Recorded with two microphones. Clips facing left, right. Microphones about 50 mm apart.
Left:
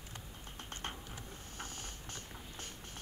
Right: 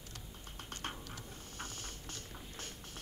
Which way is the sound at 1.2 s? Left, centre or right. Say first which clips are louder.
Even; centre.